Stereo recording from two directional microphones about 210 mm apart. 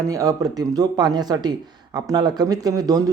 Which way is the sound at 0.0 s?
15° right (ahead or behind).